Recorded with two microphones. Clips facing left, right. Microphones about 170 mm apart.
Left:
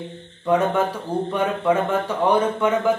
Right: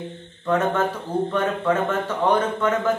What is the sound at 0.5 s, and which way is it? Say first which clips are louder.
A man's voice: left 2 dB; 10° left (ahead or behind).